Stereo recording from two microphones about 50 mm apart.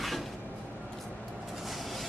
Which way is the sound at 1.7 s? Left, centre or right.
Centre.